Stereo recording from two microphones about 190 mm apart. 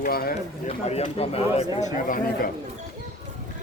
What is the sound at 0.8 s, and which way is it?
Speech, 35° left (ahead or behind).